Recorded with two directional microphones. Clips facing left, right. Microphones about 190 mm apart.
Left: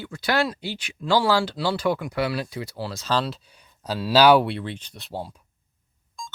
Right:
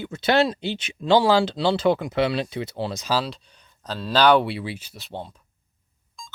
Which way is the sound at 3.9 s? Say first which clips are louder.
Left 2 dB; 10° left (ahead or behind).